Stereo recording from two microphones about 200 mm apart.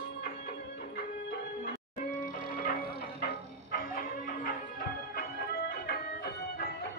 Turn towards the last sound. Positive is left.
turn(degrees=50)  # may be behind; listen again after turning